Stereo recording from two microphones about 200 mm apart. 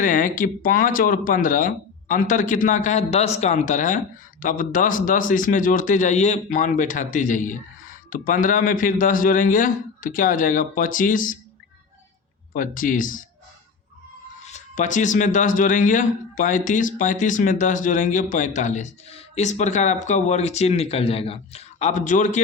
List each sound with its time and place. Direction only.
0.0 s speech: 40° left (ahead or behind)
12.5 s speech: 45° left (ahead or behind)
14.4 s speech: 35° left (ahead or behind)